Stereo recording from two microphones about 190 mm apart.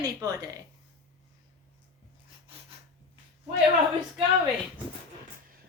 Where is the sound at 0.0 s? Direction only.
20° right (ahead or behind).